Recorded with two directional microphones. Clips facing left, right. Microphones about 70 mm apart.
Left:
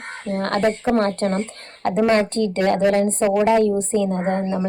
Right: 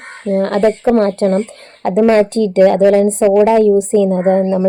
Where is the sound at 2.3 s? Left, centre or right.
Left.